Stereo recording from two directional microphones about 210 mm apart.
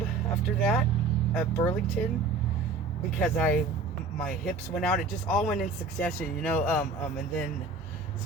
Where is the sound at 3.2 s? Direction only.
10° left (ahead or behind).